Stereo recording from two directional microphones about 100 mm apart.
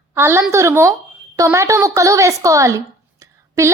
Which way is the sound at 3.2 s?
30° right (ahead or behind).